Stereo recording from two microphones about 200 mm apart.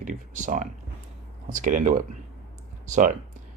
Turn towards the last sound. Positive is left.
turn(degrees=-40)  # may be behind; listen again after turning